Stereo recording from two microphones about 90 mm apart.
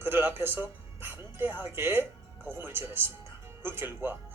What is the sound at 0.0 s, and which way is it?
Speech, 25° right (ahead or behind).